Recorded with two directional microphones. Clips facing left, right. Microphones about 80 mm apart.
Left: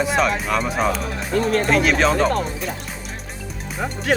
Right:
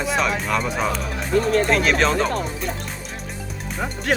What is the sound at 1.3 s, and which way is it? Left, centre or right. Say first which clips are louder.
Speech: right 1 dB; left.